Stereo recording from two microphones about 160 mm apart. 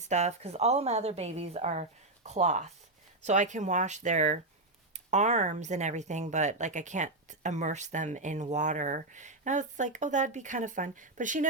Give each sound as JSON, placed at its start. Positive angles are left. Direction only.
{"t": 0.1, "sound": "speech", "side_deg": -45}